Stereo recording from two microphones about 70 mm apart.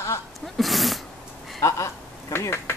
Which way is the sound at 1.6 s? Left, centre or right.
Left.